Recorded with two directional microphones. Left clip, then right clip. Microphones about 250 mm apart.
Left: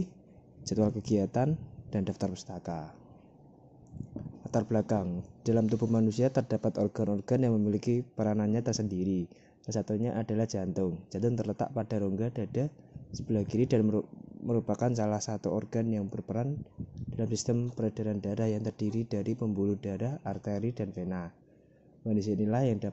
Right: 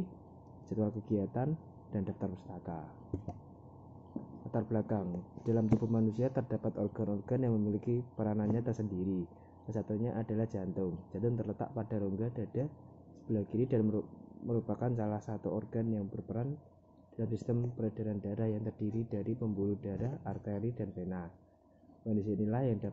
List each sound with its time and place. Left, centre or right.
0.7 s speech: left
4.5 s speech: left